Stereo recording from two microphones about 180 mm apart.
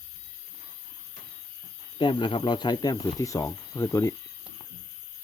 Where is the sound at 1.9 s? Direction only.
25° left (ahead or behind).